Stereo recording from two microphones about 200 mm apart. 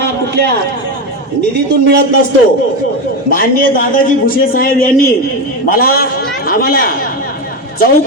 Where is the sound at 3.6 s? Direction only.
45° left (ahead or behind).